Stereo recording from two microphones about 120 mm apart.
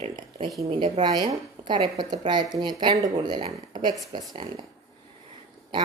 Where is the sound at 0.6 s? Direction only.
50° right (ahead or behind).